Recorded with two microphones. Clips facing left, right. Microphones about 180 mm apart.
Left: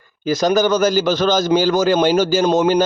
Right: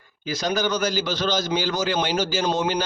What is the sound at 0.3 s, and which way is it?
Speech, 45° left (ahead or behind).